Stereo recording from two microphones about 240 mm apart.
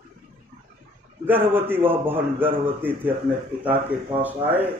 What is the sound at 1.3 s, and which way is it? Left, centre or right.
A man's voice, centre.